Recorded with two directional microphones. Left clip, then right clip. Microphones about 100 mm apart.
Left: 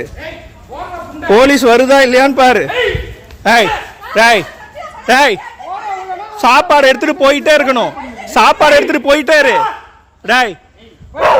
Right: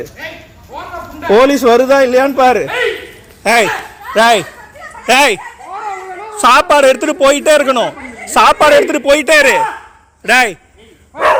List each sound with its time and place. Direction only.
1.3 s a man's voice: 20° left (ahead or behind)
4.1 s speech: centre (ahead or behind)
5.0 s a woman's voice: 20° left (ahead or behind)
6.7 s a woman's voice: 25° left (ahead or behind)
9.3 s speech: 5° left (ahead or behind)